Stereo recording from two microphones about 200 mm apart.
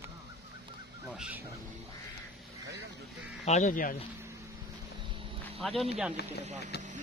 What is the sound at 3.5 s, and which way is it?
Speech, 35° left (ahead or behind).